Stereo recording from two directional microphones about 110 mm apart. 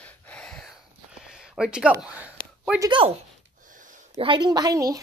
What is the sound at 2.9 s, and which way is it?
Speech, 50° right (ahead or behind).